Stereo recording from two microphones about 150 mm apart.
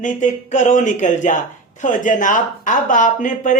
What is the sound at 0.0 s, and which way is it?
Speech, 55° left (ahead or behind).